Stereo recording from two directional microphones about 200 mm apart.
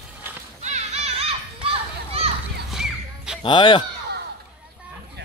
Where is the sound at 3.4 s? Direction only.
25° left (ahead or behind).